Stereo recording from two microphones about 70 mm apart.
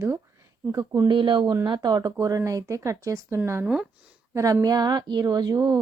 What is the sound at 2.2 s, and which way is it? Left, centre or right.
Speech, right.